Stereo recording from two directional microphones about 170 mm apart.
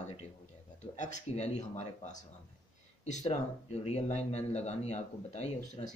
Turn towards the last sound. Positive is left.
turn(degrees=45)  # may be behind; listen again after turning